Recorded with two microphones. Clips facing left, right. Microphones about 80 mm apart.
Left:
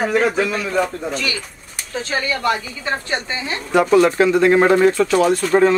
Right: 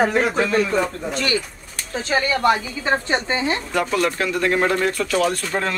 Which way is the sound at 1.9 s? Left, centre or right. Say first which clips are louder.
Right 1 dB; right.